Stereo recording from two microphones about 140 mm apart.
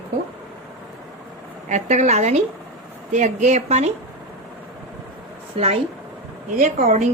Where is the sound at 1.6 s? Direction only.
60° right (ahead or behind).